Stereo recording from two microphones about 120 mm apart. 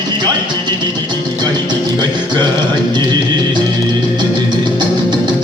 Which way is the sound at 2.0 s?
40° right (ahead or behind).